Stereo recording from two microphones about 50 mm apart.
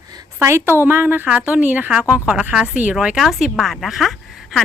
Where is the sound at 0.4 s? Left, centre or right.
Right.